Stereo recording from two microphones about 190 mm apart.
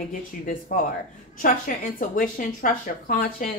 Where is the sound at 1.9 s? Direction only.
45° left (ahead or behind).